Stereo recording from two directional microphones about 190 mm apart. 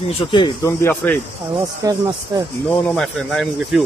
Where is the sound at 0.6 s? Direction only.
10° left (ahead or behind).